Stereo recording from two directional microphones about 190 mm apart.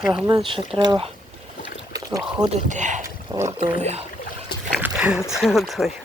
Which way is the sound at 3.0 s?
15° right (ahead or behind).